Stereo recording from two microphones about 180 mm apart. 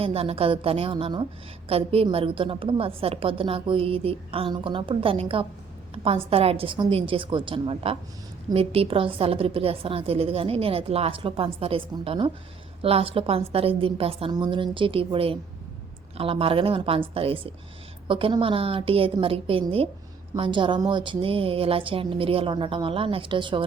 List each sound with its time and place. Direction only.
0.0 s a woman's voice: 30° right (ahead or behind)